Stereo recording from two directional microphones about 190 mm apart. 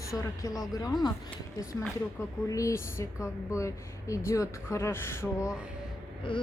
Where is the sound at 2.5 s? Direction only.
15° left (ahead or behind).